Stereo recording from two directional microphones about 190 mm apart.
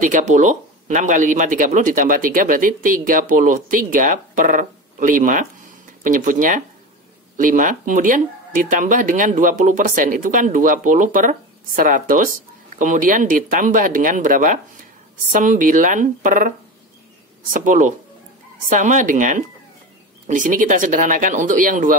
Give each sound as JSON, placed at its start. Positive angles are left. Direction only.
{"t": 0.0, "sound": "speech", "side_deg": -40}